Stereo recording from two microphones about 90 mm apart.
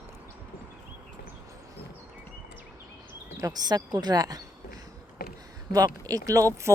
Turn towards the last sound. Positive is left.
turn(degrees=-35)  # may be behind; listen again after turning